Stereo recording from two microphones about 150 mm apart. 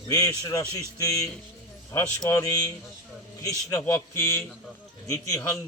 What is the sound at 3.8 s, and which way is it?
Speech, 15° left (ahead or behind).